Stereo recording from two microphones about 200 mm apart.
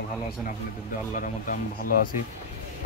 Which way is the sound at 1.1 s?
45° left (ahead or behind).